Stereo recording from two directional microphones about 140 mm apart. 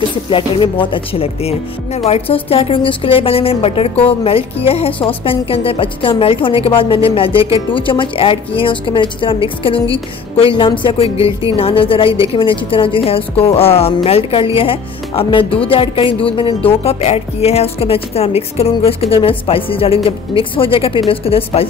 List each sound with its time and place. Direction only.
0.3 s a woman's voice: 40° left (ahead or behind)